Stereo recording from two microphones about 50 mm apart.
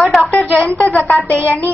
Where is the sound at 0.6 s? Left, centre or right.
Left.